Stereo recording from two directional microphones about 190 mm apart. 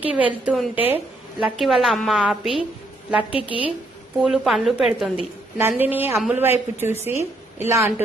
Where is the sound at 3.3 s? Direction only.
25° left (ahead or behind).